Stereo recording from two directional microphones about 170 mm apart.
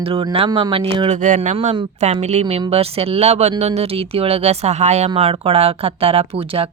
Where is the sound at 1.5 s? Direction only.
30° right (ahead or behind).